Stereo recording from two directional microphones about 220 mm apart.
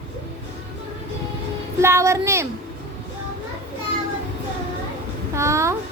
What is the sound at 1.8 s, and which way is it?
Speech, 10° right (ahead or behind).